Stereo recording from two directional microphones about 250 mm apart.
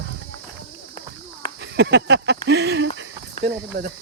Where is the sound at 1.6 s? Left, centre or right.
Right.